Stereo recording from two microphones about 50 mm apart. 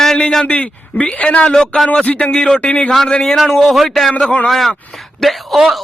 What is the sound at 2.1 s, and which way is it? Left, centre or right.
Speech, left.